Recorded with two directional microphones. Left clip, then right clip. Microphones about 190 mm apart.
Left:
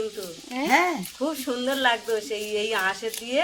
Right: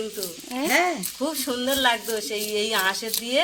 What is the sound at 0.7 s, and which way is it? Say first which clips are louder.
Speech: left 1 dB; 50° left (ahead or behind).